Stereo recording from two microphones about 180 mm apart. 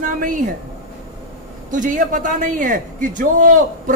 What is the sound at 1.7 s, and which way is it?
Speech, 45° right (ahead or behind).